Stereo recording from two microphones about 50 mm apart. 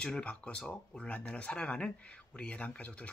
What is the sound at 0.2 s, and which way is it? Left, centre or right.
Speech, left.